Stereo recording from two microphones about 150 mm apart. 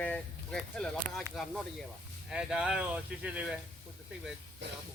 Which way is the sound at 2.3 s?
5° right (ahead or behind).